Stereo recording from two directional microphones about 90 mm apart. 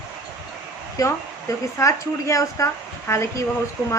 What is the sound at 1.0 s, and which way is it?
A woman's voice, 40° left (ahead or behind).